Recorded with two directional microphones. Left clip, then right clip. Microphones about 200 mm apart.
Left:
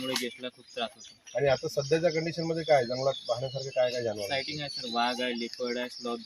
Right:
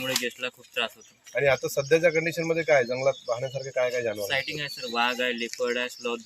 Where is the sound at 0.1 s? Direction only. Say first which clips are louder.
Right 5 dB; 15° right (ahead or behind).